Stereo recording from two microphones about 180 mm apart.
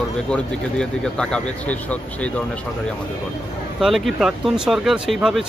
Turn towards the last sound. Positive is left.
turn(degrees=0)  # may be behind; listen again after turning